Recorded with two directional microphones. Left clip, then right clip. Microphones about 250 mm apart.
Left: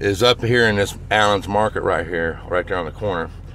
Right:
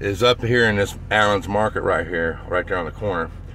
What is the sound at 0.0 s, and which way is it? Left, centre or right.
Speech, centre.